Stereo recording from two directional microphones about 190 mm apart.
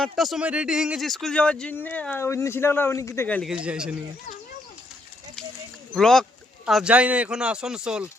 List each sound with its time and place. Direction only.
0.0 s speech: centre (ahead or behind)
3.5 s speech: 5° right (ahead or behind)
5.9 s speech: centre (ahead or behind)